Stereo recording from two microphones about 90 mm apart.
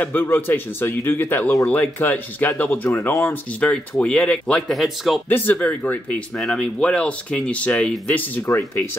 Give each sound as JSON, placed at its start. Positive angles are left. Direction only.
{"t": 0.0, "sound": "a man's voice", "side_deg": 20}
{"t": 3.6, "sound": "speech", "side_deg": 10}
{"t": 5.3, "sound": "a man's voice", "side_deg": 20}
{"t": 6.3, "sound": "speech", "side_deg": 5}
{"t": 8.5, "sound": "speech", "side_deg": 35}